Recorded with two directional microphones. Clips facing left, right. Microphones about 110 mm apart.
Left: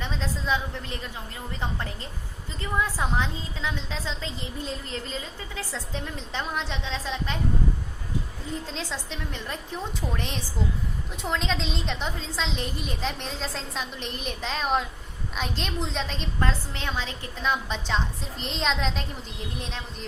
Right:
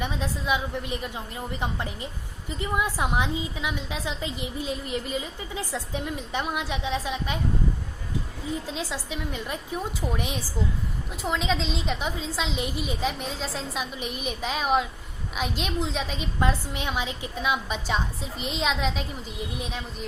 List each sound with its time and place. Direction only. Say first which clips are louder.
0.0 s a woman's voice: right 2 dB; 15° right (ahead or behind)
8.6 s a woman's voice: right 2 dB; 10° right (ahead or behind)